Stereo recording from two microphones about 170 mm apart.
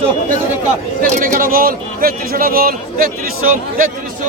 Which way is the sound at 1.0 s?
55° right (ahead or behind).